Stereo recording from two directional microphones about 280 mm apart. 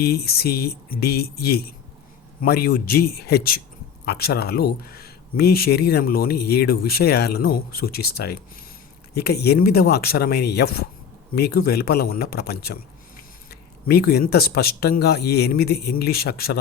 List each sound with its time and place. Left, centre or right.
0.0 s speech: left